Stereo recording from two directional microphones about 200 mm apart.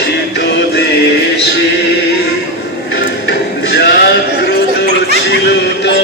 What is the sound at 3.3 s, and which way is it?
Music, 60° left (ahead or behind).